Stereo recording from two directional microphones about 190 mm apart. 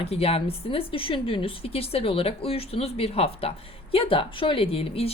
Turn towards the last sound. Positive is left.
turn(degrees=30)  # may be behind; listen again after turning